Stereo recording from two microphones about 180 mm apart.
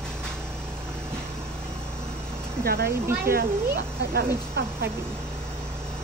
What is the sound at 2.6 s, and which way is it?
Speech, 55° right (ahead or behind).